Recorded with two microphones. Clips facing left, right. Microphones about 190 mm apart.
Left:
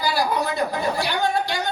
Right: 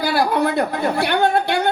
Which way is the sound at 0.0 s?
60° right (ahead or behind).